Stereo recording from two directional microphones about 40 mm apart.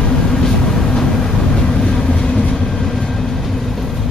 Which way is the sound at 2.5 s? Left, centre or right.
Centre.